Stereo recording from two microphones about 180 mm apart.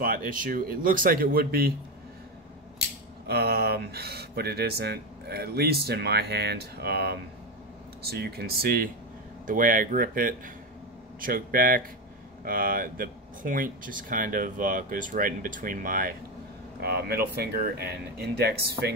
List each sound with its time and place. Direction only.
0.0 s speech: 50° right (ahead or behind)
3.3 s speech: 60° right (ahead or behind)
16.8 s speech: 60° right (ahead or behind)